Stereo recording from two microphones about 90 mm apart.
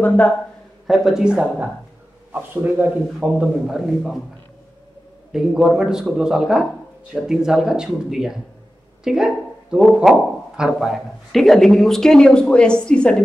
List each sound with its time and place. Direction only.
0.0 s speech: 20° left (ahead or behind)
0.8 s a man's voice: 5° right (ahead or behind)
2.3 s a man's voice: 20° right (ahead or behind); by 4.2 s 5° right (ahead or behind)
5.3 s speech: 5° right (ahead or behind); by 13.1 s 10° left (ahead or behind)